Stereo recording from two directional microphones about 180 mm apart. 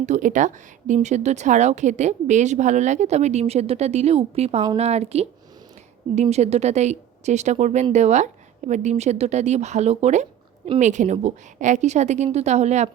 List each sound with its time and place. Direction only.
0.0 s speech: 45° right (ahead or behind)